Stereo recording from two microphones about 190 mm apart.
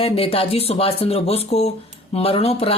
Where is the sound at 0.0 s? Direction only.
30° left (ahead or behind).